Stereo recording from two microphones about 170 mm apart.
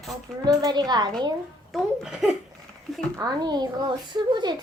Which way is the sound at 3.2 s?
25° right (ahead or behind).